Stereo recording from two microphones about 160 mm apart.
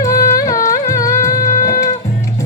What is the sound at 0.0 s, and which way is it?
Music, 20° left (ahead or behind).